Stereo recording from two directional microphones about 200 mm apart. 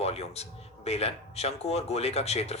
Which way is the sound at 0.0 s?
30° left (ahead or behind).